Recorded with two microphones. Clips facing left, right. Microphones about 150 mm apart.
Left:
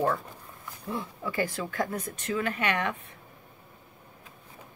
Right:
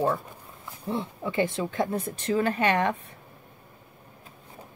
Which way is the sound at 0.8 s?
25° right (ahead or behind).